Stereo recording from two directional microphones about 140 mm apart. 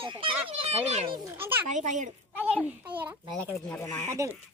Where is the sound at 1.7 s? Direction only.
60° right (ahead or behind).